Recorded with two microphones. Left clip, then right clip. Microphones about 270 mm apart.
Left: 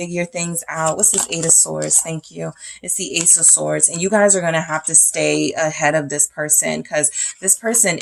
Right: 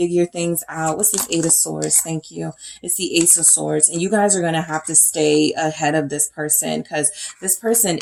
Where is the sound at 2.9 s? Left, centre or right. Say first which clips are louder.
Right 1 dB; left.